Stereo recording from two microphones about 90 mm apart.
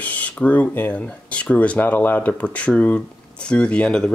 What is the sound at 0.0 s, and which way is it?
Speech, 15° left (ahead or behind).